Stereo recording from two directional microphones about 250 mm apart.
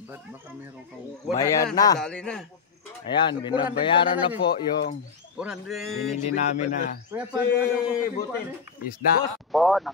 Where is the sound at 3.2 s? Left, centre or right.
Centre.